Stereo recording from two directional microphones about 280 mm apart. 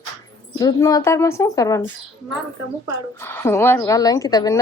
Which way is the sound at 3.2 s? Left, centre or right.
Centre.